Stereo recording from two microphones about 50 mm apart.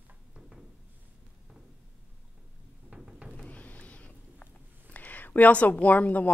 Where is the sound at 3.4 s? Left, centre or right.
Left.